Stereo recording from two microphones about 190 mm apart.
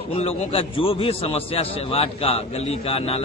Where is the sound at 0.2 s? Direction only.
30° left (ahead or behind).